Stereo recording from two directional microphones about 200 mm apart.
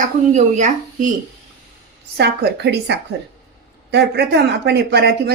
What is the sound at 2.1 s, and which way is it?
Speech, 55° right (ahead or behind).